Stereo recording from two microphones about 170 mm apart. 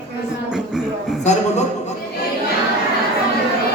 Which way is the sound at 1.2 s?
45° left (ahead or behind).